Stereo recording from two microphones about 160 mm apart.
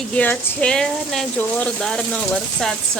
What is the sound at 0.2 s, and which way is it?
Speech, 10° left (ahead or behind).